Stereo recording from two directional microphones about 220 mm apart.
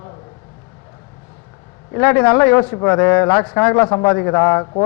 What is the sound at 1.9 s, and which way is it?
Speech, 10° left (ahead or behind).